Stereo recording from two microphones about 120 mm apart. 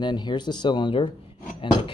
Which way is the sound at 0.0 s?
40° left (ahead or behind).